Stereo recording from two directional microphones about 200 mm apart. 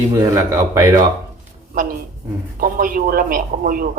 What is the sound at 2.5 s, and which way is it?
Speech, 45° right (ahead or behind).